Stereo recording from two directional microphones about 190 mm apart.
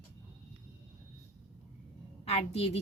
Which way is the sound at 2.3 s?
30° left (ahead or behind).